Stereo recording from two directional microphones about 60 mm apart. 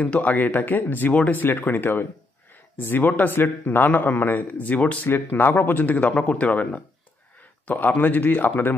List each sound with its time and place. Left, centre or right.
0.0 s a man's voice: left